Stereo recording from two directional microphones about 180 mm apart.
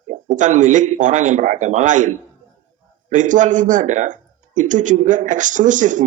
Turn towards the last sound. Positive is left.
turn(degrees=-45)  # may be behind; listen again after turning